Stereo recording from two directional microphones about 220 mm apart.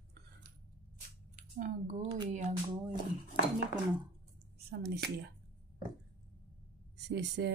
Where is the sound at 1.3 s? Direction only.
35° right (ahead or behind).